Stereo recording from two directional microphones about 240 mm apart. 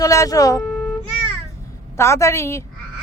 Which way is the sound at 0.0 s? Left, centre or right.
Centre.